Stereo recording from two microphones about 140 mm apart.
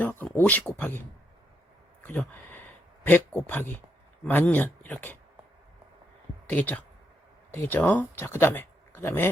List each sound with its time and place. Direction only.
0.0 s speech: 10° left (ahead or behind)
2.0 s speech: 10° left (ahead or behind)
6.5 s speech: 10° left (ahead or behind)